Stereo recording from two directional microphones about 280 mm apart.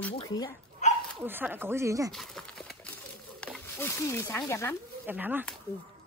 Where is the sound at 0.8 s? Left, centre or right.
Left.